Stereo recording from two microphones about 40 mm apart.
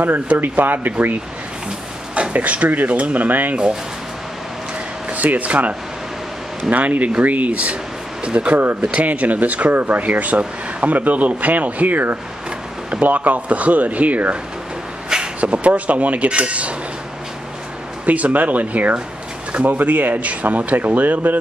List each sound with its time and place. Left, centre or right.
0.0 s speech: right
2.1 s speech: right
3.3 s speech: right
5.1 s speech: right
15.4 s speech: right
18.0 s speech: right